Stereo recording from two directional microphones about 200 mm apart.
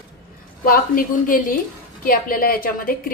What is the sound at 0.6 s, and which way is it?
A woman's voice, 45° left (ahead or behind).